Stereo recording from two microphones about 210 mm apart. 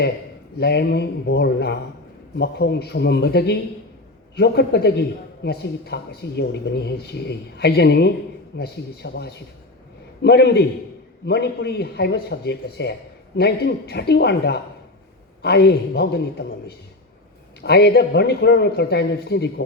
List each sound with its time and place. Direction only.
0.6 s a man's voice: 50° left (ahead or behind)